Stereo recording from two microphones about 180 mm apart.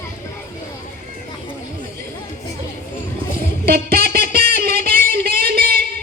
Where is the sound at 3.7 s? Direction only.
55° right (ahead or behind).